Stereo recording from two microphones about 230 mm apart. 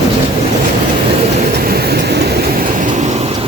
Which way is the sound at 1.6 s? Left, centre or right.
Right.